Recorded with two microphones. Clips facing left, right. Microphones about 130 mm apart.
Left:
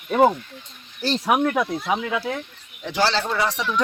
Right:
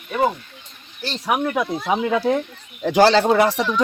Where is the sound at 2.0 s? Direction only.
35° right (ahead or behind).